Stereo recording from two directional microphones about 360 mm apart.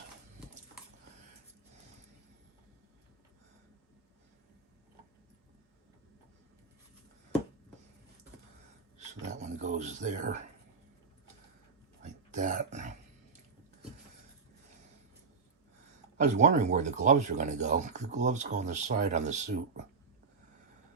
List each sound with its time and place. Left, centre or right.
9.0 s a sound: centre
12.3 s speech: right
16.1 s speech: centre